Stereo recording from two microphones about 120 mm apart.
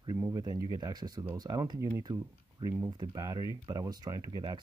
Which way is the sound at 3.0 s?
35° right (ahead or behind).